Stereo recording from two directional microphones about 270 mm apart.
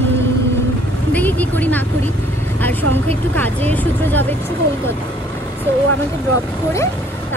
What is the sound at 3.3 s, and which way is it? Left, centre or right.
Speech, centre.